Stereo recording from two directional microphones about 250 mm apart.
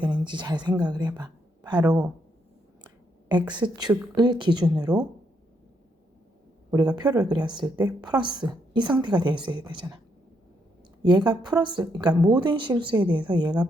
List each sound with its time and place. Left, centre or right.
0.0 s a woman's voice: centre
2.8 s a sound: centre
3.5 s speech: centre
6.7 s speech: centre
11.1 s speech: centre